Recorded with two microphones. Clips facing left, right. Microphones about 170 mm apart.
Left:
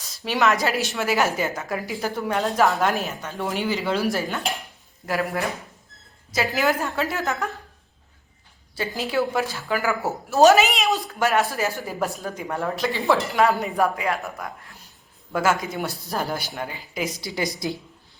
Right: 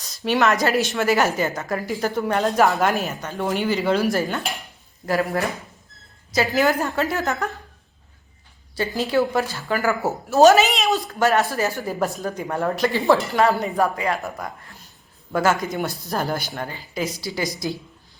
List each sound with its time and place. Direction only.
0.3 s a woman's voice: centre (ahead or behind)
6.6 s a woman's voice: centre (ahead or behind)
8.7 s a woman's voice: 5° left (ahead or behind); by 17.5 s 20° left (ahead or behind)